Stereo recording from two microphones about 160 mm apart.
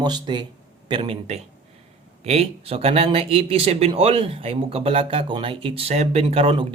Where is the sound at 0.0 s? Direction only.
25° right (ahead or behind).